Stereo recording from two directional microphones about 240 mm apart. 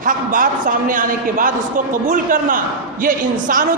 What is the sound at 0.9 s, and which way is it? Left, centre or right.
A man's voice, right.